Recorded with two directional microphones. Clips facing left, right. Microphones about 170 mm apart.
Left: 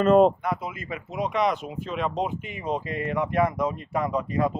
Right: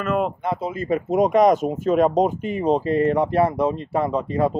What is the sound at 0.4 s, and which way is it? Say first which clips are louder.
Speech: right 5 dB; 25° right (ahead or behind).